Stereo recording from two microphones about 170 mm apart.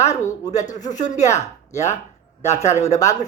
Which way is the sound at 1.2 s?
20° left (ahead or behind).